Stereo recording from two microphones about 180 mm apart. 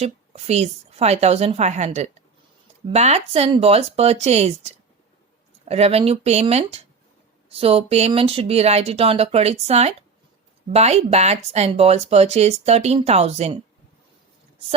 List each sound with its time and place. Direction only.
0.0 s speech: 35° right (ahead or behind)